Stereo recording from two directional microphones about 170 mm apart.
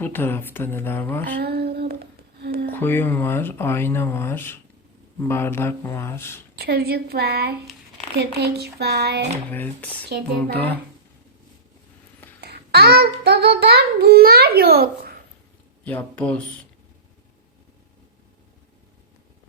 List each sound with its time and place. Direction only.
0.0 s speech: 10° left (ahead or behind)
1.4 s a sound: 70° right (ahead or behind)
2.6 s speech: 10° left (ahead or behind)
6.6 s a child's voice: 65° right (ahead or behind)
10.3 s speech: 10° left (ahead or behind)
12.4 s a child's voice: 70° right (ahead or behind)
15.8 s speech: 10° left (ahead or behind)